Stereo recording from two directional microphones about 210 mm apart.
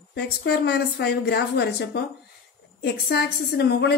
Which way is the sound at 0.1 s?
55° left (ahead or behind).